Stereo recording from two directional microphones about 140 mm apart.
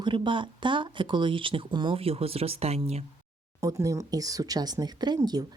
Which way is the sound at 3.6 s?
25° right (ahead or behind).